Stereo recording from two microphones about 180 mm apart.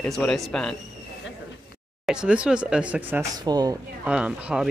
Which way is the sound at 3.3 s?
20° right (ahead or behind).